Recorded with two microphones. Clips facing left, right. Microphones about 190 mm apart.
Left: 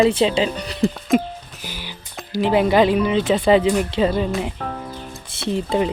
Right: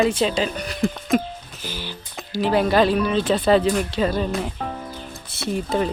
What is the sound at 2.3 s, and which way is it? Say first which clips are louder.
Speech: left 2 dB; 20° left (ahead or behind).